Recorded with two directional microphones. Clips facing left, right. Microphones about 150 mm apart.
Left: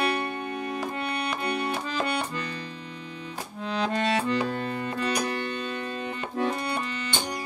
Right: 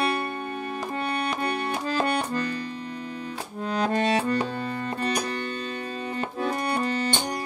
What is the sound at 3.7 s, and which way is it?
Music, 45° right (ahead or behind).